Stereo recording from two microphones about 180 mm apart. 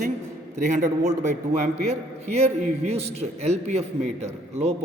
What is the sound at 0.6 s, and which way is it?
A man's voice, 45° right (ahead or behind).